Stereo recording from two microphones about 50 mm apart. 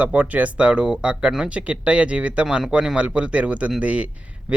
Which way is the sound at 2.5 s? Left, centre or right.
Centre.